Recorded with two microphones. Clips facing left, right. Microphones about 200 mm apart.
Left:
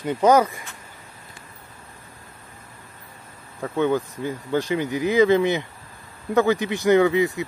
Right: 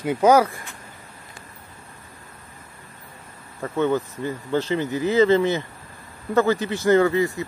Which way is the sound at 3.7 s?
15° left (ahead or behind).